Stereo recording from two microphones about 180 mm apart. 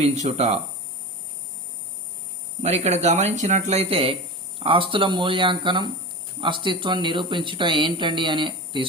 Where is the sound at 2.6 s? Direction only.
35° right (ahead or behind).